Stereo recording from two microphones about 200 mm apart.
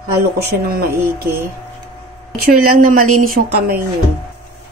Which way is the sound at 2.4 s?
45° right (ahead or behind).